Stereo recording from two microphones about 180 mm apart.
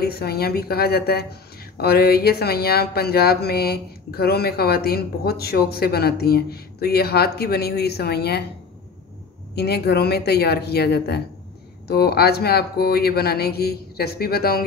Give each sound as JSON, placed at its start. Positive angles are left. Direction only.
{"t": 0.0, "sound": "speech", "side_deg": 60}
{"t": 9.6, "sound": "speech", "side_deg": 65}